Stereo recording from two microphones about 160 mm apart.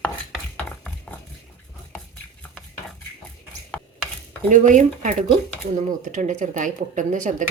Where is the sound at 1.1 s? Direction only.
10° left (ahead or behind).